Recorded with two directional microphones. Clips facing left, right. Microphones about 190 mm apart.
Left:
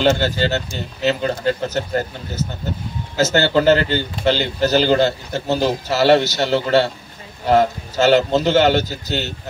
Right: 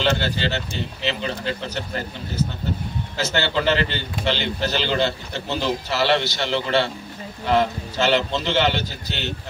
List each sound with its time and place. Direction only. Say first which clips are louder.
0.0 s speech: left 5 dB; 45° left (ahead or behind)